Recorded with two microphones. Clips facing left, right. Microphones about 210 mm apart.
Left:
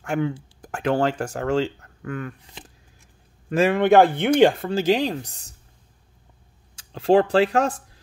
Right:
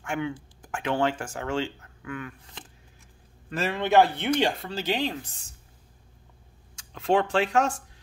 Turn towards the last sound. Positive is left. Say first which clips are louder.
# left 5 dB
turn(degrees=35)  # may be behind; listen again after turning